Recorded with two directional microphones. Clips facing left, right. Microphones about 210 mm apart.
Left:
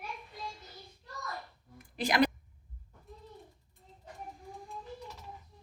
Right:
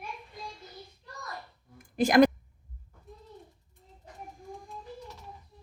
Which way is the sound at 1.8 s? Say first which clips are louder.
Right 8 dB; 45° right (ahead or behind).